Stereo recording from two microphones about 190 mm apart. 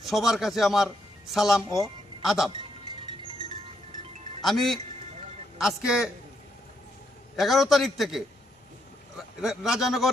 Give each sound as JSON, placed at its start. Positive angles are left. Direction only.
{"t": 0.0, "sound": "a man's voice", "side_deg": 0}
{"t": 2.5, "sound": "music", "side_deg": -25}
{"t": 4.4, "sound": "speech", "side_deg": 0}
{"t": 7.3, "sound": "speech", "side_deg": 0}